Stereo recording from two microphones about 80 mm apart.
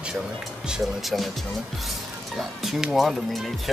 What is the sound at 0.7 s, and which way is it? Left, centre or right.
Speech, centre.